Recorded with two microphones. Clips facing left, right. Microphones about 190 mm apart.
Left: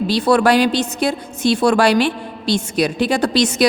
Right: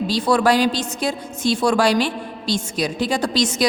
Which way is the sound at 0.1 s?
65° left (ahead or behind).